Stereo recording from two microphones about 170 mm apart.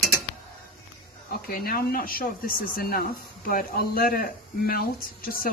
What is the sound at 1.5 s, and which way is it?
Speech, 60° left (ahead or behind).